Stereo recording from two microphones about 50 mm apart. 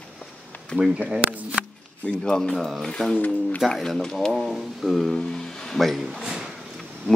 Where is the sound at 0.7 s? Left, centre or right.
Centre.